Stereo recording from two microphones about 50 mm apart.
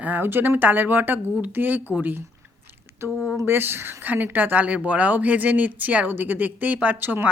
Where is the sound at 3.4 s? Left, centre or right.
Right.